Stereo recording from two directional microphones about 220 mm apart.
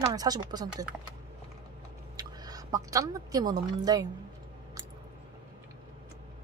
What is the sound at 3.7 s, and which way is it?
Speech, 20° right (ahead or behind).